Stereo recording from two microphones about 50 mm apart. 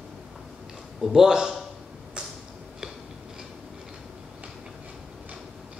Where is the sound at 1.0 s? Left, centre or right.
Centre.